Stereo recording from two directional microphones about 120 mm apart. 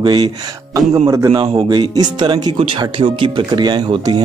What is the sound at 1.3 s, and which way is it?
Speech, 45° right (ahead or behind).